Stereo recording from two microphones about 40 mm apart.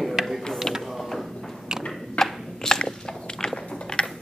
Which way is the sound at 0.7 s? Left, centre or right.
Centre.